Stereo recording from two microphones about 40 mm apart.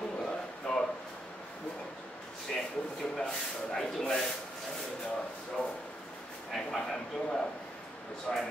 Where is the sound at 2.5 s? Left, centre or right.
Centre.